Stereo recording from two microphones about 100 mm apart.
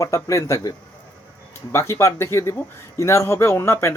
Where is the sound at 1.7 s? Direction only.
30° left (ahead or behind).